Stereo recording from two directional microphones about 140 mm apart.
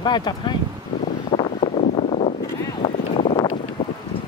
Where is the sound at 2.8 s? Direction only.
50° left (ahead or behind).